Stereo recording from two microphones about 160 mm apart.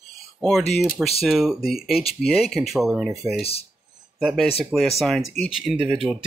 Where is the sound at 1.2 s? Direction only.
Centre (ahead or behind).